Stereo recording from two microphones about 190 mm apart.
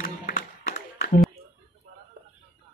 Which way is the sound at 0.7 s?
45° left (ahead or behind).